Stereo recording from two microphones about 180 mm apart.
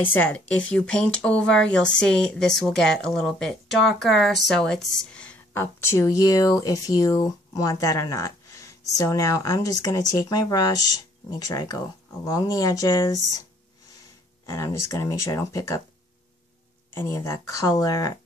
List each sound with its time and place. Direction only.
0.0 s speech: 10° left (ahead or behind)
14.4 s speech: 15° left (ahead or behind)
16.9 s speech: 15° left (ahead or behind)